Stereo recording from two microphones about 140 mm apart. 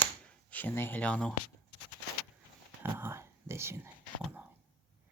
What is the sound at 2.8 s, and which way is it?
Whispering, 15° right (ahead or behind).